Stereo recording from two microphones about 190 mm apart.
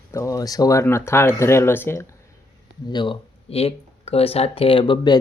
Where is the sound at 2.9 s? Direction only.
25° left (ahead or behind).